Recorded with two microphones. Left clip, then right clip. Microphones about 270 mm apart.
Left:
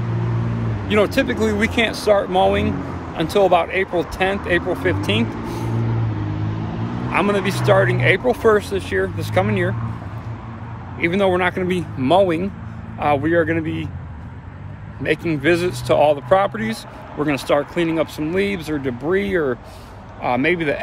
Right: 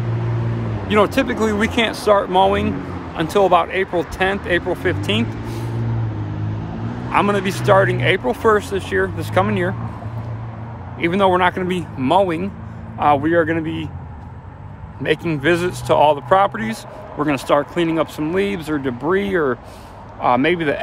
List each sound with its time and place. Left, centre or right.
0.8 s speech: centre
5.4 s vehicle: left
7.1 s speech: centre
11.0 s speech: centre
15.0 s speech: centre